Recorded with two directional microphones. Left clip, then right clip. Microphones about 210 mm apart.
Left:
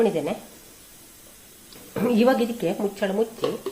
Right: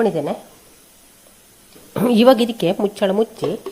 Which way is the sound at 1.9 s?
45° right (ahead or behind).